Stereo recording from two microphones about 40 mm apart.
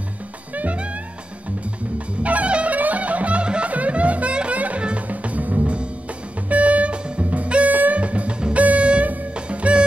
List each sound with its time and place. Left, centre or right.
0.6 s music: right
2.2 s music: right
5.6 s music: right
7.7 s music: right
8.0 s music: right